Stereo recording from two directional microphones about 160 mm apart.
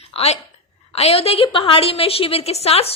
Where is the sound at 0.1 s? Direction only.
40° left (ahead or behind).